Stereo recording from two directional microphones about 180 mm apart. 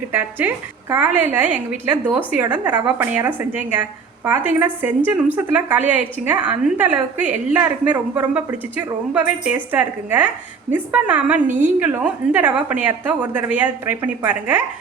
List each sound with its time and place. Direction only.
0.1 s a woman's voice: 10° right (ahead or behind)